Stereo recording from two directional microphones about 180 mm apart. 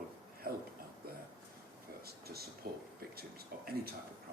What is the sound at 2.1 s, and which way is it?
Speech, 60° right (ahead or behind).